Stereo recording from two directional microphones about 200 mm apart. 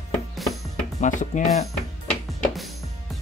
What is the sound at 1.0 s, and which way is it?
Speech, 40° left (ahead or behind).